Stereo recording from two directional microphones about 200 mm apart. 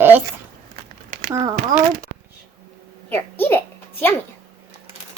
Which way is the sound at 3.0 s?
10° left (ahead or behind).